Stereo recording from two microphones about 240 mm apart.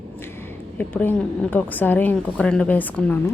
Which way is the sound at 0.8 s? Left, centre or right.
Centre.